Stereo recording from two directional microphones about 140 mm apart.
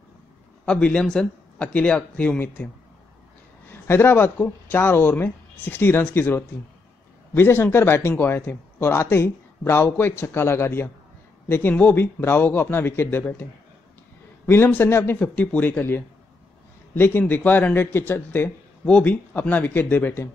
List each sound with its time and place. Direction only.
0.7 s speech: 5° left (ahead or behind)
3.8 s speech: 15° left (ahead or behind)